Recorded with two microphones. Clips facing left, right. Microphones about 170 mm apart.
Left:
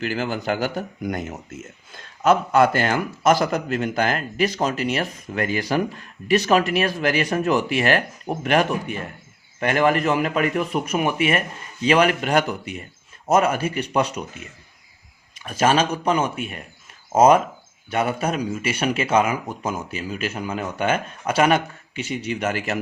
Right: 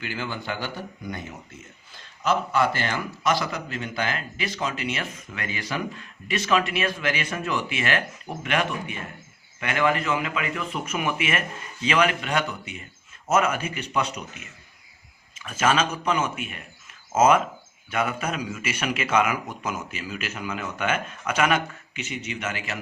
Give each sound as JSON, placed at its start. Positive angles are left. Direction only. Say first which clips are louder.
{"t": 0.1, "sound": "a man's voice", "louder": "left 7 dB", "side_deg": 45}